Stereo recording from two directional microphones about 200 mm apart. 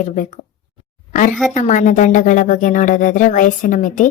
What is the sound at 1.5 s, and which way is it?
Speech, 35° left (ahead or behind).